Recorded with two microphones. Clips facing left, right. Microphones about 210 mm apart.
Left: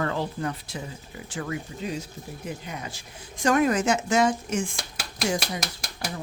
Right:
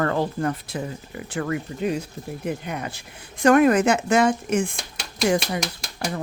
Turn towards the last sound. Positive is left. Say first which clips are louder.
# right 5 dB
turn(degrees=-60)  # may be behind; listen again after turning